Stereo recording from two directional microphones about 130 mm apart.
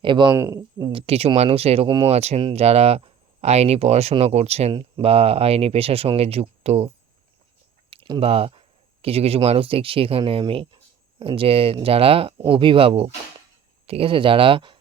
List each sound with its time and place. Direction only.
0.0 s speech: 40° right (ahead or behind)
0.3 s speech: 20° right (ahead or behind)
0.9 s speech: 50° right (ahead or behind)
7.9 s a sound: 45° right (ahead or behind)
8.2 s speech: 50° right (ahead or behind)